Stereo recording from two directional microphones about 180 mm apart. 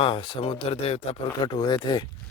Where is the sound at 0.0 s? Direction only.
30° left (ahead or behind).